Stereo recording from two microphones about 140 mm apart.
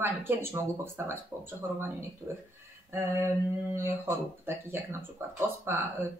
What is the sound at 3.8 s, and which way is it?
Speech, 15° right (ahead or behind).